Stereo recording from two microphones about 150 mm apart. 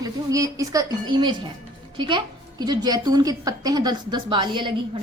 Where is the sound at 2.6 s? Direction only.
30° right (ahead or behind).